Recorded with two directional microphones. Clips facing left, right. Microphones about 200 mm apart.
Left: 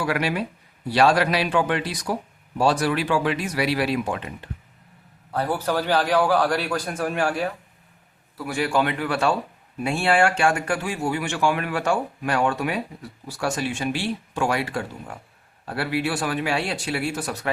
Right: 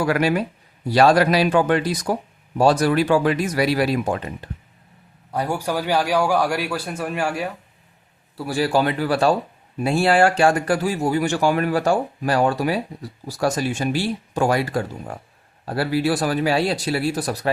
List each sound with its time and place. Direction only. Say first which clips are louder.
0.0 s speech: right 5 dB; 45° right (ahead or behind)
5.3 s a man's voice: even; 15° right (ahead or behind)
8.4 s speech: right 3 dB; 35° right (ahead or behind)